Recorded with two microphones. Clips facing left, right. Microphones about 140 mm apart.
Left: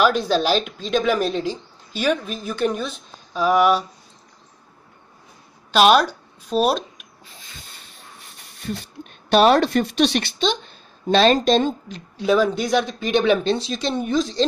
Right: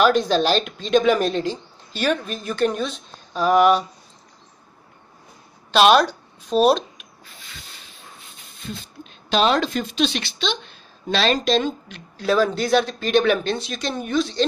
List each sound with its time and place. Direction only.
0.0 s speech: 5° left (ahead or behind)
5.7 s speech: 10° left (ahead or behind)
9.3 s a woman's voice: 55° left (ahead or behind)
12.2 s speech: 15° left (ahead or behind)